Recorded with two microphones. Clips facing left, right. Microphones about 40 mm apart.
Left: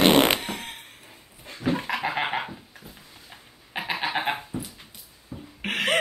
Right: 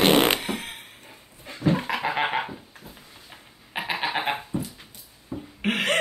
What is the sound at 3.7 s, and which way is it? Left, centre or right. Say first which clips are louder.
Goat: right 1 dB; centre.